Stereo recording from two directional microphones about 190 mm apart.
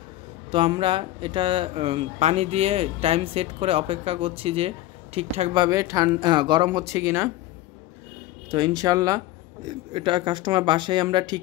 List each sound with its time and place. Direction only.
0.5 s speech: 25° right (ahead or behind)
8.5 s speech: 25° right (ahead or behind)